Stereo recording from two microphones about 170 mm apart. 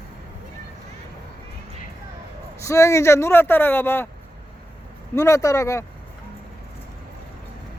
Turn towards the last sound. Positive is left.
turn(degrees=15)  # may be behind; listen again after turning